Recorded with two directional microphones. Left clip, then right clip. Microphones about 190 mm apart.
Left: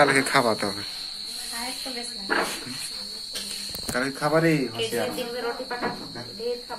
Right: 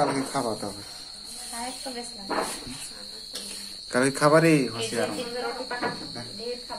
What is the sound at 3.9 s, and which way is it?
Speech, 50° right (ahead or behind).